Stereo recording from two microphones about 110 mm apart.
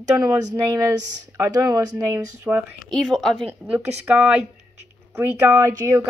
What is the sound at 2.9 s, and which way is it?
Speech, centre (ahead or behind).